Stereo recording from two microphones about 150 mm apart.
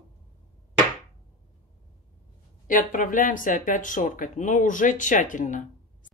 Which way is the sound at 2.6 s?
60° left (ahead or behind).